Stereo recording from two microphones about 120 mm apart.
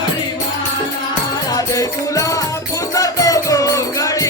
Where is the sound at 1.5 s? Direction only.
30° left (ahead or behind).